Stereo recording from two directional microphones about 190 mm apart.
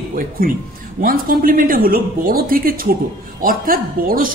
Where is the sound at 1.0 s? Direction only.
50° right (ahead or behind).